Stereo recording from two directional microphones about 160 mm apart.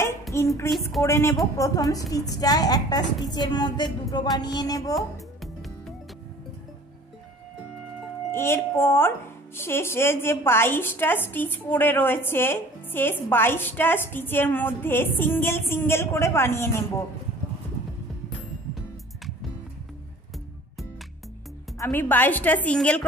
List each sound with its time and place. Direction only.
0.3 s a sound: 15° left (ahead or behind)
1.0 s a woman's voice: 15° left (ahead or behind)
4.9 s music: centre (ahead or behind)
8.3 s a woman's voice: 15° left (ahead or behind)
21.7 s a woman's voice: 15° left (ahead or behind)